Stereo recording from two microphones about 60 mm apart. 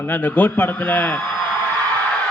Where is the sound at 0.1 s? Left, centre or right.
Left.